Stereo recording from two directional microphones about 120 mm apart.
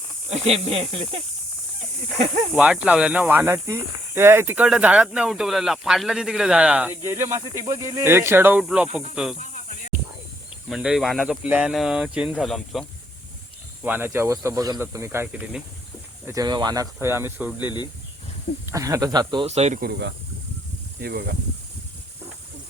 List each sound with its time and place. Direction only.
0.3 s speech: 60° right (ahead or behind)
2.5 s speech: 5° right (ahead or behind)
4.5 s speech: 5° right (ahead or behind)
7.0 s speech: 25° right (ahead or behind); by 9.3 s 5° right (ahead or behind)
10.7 s speech: 5° right (ahead or behind)
13.8 s speech: 15° right (ahead or behind)
15.3 s speech: 10° right (ahead or behind)
16.2 s speech: 30° right (ahead or behind)
18.6 s speech: 25° right (ahead or behind)
19.5 s speech: 70° right (ahead or behind)